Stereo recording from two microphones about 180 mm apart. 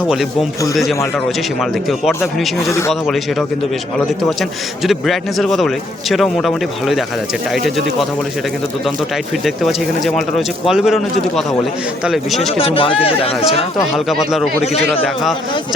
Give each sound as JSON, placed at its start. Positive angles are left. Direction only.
{"t": 0.7, "sound": "a man's voice", "side_deg": 0}
{"t": 2.6, "sound": "speech", "side_deg": 15}
{"t": 2.9, "sound": "a man's voice", "side_deg": 0}
{"t": 9.4, "sound": "a man's voice", "side_deg": 0}
{"t": 12.5, "sound": "speech", "side_deg": 30}
{"t": 13.7, "sound": "a man's voice", "side_deg": 0}